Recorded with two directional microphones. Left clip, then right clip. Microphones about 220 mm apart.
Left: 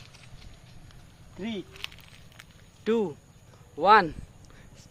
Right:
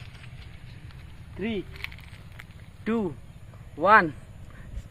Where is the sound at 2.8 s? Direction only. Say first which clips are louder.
Left 3 dB; 35° left (ahead or behind).